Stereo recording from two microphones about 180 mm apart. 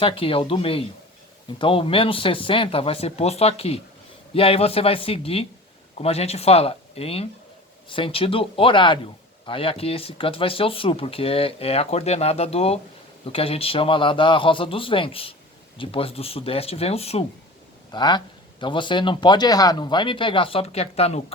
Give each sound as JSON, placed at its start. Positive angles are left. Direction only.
{"t": 0.0, "sound": "speech", "side_deg": 30}
{"t": 17.9, "sound": "speech", "side_deg": 25}